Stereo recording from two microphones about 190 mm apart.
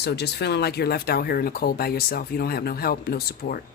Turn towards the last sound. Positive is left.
turn(degrees=55)  # may be behind; listen again after turning